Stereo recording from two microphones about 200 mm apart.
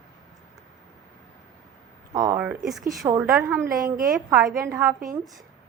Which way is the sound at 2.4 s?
5° right (ahead or behind).